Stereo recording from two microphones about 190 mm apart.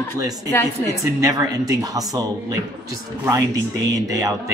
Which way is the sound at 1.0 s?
15° right (ahead or behind).